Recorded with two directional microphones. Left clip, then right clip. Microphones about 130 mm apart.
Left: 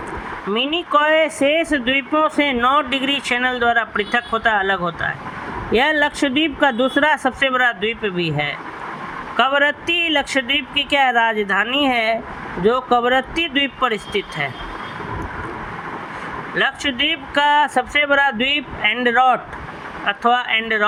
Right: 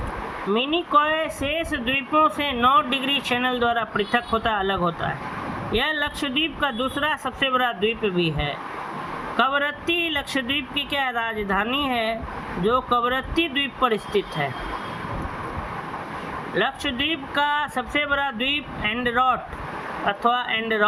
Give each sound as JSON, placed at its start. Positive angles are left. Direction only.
{"t": 0.5, "sound": "speech", "side_deg": 45}
{"t": 16.6, "sound": "speech", "side_deg": 45}